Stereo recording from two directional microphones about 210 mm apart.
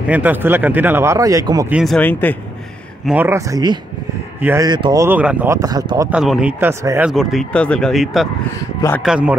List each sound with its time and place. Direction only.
0.0 s speech: 5° right (ahead or behind)
1.7 s speech: 5° right (ahead or behind)
2.0 s speech: 10° left (ahead or behind)
3.1 s speech: 10° right (ahead or behind)
6.1 s speech: 5° right (ahead or behind)
7.1 s speech: centre (ahead or behind)
8.5 s speech: 15° left (ahead or behind)
9.0 s speech: 5° right (ahead or behind)